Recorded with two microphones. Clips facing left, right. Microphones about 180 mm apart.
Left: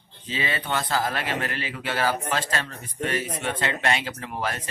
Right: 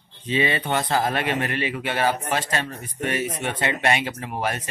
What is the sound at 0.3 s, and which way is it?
Speech, 25° right (ahead or behind).